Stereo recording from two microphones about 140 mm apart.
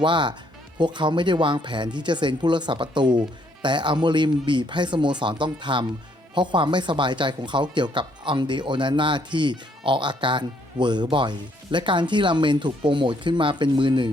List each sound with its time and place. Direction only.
0.0 s speech: 35° right (ahead or behind)